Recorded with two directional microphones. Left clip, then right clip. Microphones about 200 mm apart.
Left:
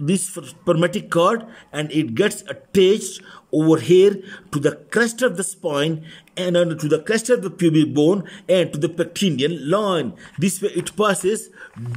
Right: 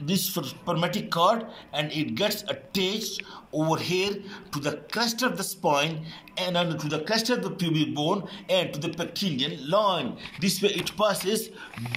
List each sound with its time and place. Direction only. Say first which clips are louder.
0.0 s speech: left 4 dB; 60° left (ahead or behind)